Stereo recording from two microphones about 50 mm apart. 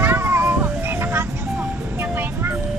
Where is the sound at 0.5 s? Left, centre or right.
Right.